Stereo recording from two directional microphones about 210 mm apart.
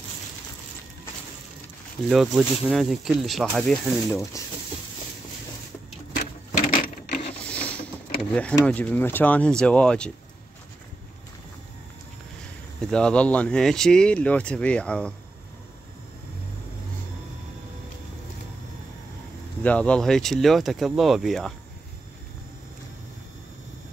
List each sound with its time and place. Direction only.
2.0 s speech: centre (ahead or behind)
6.1 s sewing machine: 40° left (ahead or behind)
7.4 s a sound: 5° left (ahead or behind)
8.3 s speech: 5° left (ahead or behind)
12.9 s speech: 5° left (ahead or behind)
19.6 s speech: 5° left (ahead or behind)